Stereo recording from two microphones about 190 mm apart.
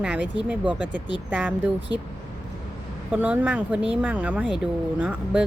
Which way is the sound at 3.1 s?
10° right (ahead or behind).